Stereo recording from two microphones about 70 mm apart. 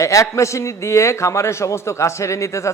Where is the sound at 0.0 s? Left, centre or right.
Left.